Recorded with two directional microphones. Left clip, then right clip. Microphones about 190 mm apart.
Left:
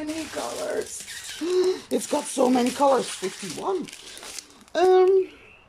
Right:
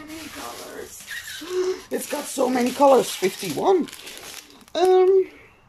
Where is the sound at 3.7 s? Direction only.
25° right (ahead or behind).